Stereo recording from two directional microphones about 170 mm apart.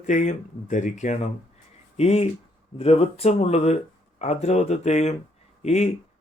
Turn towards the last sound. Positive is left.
turn(degrees=40)  # may be behind; listen again after turning